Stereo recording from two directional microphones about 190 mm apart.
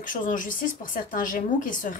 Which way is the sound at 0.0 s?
45° left (ahead or behind).